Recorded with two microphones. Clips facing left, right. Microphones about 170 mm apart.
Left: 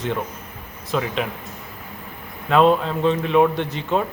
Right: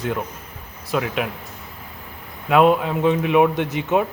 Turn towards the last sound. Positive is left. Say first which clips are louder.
# right 2 dB
turn(degrees=-15)  # may be behind; listen again after turning